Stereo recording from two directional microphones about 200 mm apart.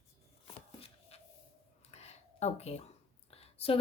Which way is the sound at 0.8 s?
30° left (ahead or behind).